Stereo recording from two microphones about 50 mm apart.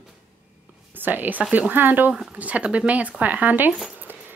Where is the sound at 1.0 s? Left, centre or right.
Right.